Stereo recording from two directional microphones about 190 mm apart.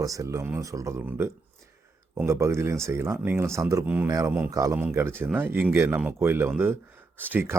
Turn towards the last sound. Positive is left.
turn(degrees=-10)  # may be behind; listen again after turning